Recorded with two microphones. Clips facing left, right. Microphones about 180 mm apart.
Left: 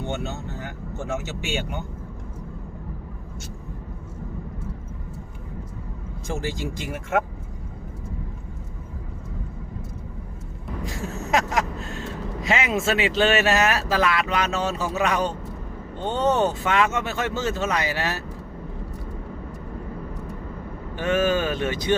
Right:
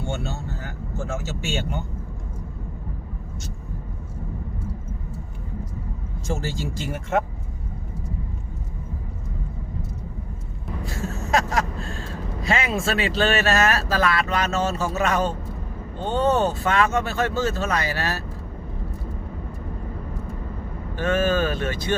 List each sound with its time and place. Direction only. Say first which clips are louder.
0.0 s speech: even; 20° left (ahead or behind)
6.2 s speech: even; 15° left (ahead or behind)
10.8 s speech: even; 15° left (ahead or behind)
20.9 s speech: even; 15° left (ahead or behind)